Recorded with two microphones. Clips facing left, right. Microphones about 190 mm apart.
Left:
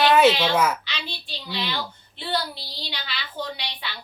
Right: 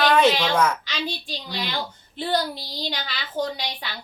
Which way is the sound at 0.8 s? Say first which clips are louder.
Right 6 dB; 45° right (ahead or behind).